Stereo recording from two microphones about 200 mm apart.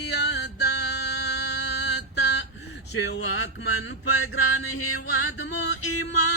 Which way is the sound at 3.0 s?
65° left (ahead or behind).